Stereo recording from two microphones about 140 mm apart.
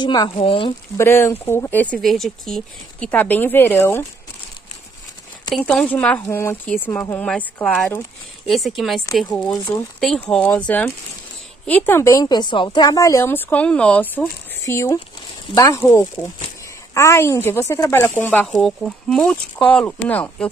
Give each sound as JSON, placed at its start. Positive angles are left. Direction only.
{"t": 0.0, "sound": "speech", "side_deg": 30}
{"t": 0.9, "sound": "speech", "side_deg": 20}
{"t": 2.0, "sound": "speech", "side_deg": 0}
{"t": 5.5, "sound": "speech", "side_deg": 5}
{"t": 9.5, "sound": "a woman's voice", "side_deg": 25}
{"t": 9.9, "sound": "a woman's voice", "side_deg": 5}
{"t": 14.6, "sound": "a woman's voice", "side_deg": 20}
{"t": 18.5, "sound": "speech", "side_deg": 0}